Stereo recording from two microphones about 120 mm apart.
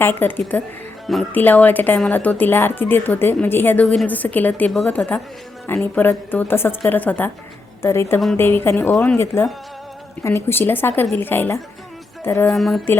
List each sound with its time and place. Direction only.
0.0 s a woman's voice: 15° left (ahead or behind)
12.5 s speech: centre (ahead or behind)